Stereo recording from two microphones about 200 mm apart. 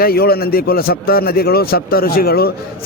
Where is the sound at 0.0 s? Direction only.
50° left (ahead or behind).